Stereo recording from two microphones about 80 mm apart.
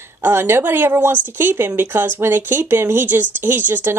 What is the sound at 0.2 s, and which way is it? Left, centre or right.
A woman's voice, right.